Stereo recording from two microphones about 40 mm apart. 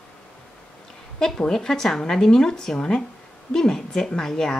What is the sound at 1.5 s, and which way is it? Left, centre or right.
Speech, centre.